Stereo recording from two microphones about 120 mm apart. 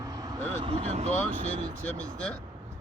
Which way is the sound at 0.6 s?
55° right (ahead or behind).